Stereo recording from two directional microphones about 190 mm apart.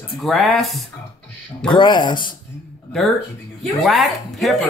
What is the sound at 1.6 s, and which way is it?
Speech, 25° left (ahead or behind).